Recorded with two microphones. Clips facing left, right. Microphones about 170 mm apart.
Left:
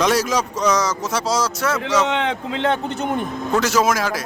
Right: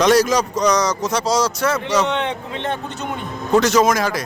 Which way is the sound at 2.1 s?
90° left.